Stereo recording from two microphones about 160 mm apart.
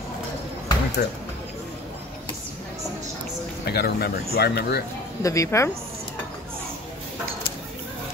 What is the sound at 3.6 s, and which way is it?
Speech, 90° left.